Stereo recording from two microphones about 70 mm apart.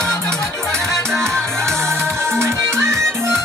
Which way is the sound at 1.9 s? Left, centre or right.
Right.